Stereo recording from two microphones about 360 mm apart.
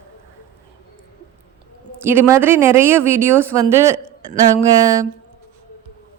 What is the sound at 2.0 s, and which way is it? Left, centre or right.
A woman's voice, centre.